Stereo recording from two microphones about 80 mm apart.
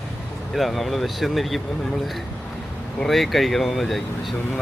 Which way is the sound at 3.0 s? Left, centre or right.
Centre.